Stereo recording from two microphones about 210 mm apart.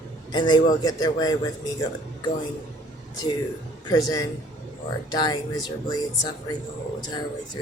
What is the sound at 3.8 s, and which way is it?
A man's voice, 15° left (ahead or behind).